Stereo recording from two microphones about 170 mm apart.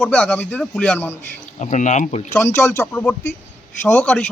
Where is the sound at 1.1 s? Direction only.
45° left (ahead or behind).